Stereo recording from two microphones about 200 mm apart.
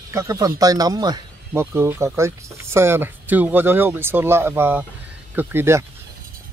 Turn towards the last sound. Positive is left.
turn(degrees=-10)  # may be behind; listen again after turning